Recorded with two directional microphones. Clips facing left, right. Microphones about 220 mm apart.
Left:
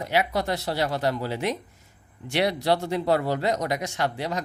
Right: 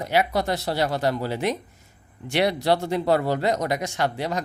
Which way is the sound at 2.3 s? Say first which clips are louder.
Right 2 dB; 55° right (ahead or behind).